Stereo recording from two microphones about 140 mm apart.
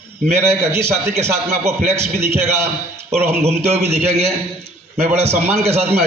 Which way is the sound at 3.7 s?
50° right (ahead or behind).